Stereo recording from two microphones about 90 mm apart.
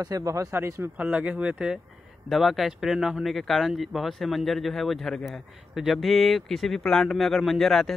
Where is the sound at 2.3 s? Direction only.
Centre (ahead or behind).